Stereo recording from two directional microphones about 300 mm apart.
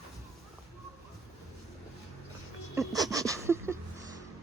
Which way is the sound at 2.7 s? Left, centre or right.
Centre.